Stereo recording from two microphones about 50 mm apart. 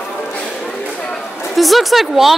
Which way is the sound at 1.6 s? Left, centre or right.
Centre.